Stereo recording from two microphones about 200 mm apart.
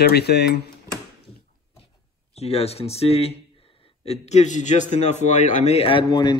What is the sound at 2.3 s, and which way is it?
A man's voice, 30° left (ahead or behind).